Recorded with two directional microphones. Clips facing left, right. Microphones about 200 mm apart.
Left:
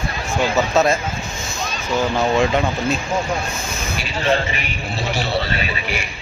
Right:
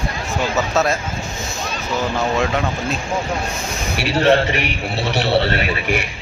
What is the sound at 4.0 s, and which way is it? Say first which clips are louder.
A man's voice: right 6 dB; 70° right (ahead or behind).